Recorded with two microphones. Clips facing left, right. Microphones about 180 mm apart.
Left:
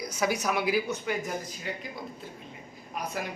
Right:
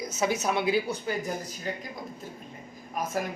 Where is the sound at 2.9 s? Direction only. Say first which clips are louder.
Right 4 dB; 45° right (ahead or behind).